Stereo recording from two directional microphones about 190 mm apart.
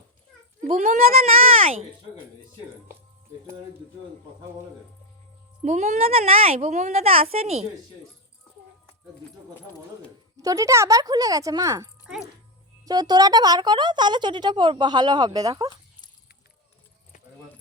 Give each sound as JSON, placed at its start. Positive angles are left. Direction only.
{"t": 0.8, "sound": "a child's voice", "side_deg": -40}
{"t": 5.6, "sound": "a child's voice", "side_deg": -35}
{"t": 10.4, "sound": "a woman's voice", "side_deg": -15}